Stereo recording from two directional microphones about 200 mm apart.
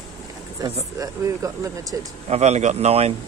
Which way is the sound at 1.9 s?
15° right (ahead or behind).